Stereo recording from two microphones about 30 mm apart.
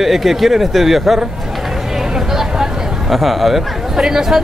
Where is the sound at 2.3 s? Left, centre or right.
Centre.